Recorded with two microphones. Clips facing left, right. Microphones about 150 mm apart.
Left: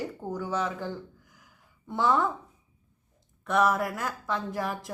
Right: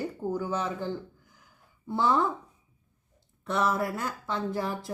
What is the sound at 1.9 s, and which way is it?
Speech, 30° right (ahead or behind).